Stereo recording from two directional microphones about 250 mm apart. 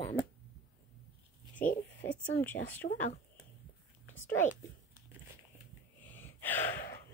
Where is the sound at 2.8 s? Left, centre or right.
Left.